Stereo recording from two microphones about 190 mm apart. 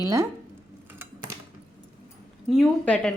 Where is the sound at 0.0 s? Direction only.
15° right (ahead or behind).